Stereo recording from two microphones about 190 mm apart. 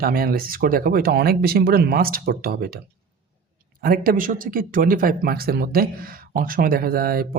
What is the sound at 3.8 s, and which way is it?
Speech, 50° right (ahead or behind).